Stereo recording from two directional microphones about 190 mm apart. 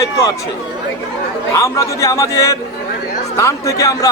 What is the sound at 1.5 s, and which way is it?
Speech, 15° left (ahead or behind).